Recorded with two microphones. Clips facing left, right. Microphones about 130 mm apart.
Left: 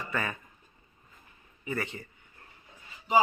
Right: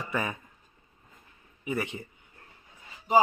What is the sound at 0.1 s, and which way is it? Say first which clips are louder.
Speech: right 2 dB; 15° right (ahead or behind).